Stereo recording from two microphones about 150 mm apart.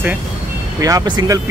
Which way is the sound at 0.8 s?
25° right (ahead or behind).